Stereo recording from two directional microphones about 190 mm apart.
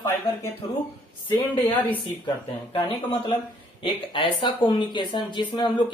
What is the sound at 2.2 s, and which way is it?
Speech, 25° left (ahead or behind).